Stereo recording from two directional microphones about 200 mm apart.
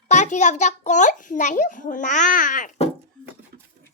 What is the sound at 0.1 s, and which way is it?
A child's voice, 35° left (ahead or behind).